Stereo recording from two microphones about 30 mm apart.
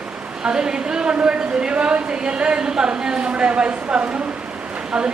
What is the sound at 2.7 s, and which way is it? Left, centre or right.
A woman's voice, right.